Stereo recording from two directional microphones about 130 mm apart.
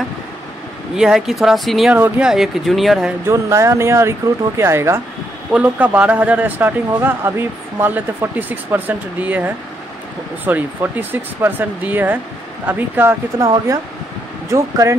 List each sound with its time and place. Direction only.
0.9 s speech: 5° right (ahead or behind)
2.0 s speech: 10° right (ahead or behind)
3.3 s speech: 25° right (ahead or behind)
14.5 s speech: 25° right (ahead or behind)